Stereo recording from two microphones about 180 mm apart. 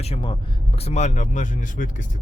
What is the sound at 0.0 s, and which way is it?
Speech, 30° left (ahead or behind).